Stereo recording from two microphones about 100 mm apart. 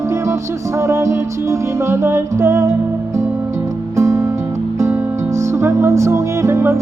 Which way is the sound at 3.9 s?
30° right (ahead or behind).